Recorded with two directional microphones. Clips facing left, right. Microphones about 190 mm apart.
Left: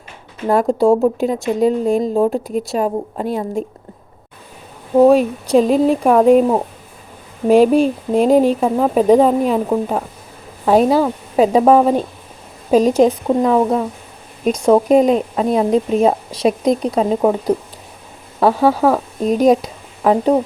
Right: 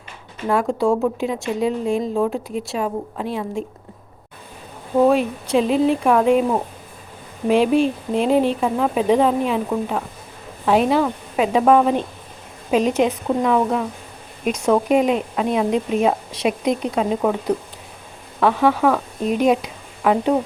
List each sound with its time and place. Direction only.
0.4 s a woman's voice: 35° left (ahead or behind)
4.9 s a woman's voice: 40° left (ahead or behind)
18.3 s speech: 35° left (ahead or behind)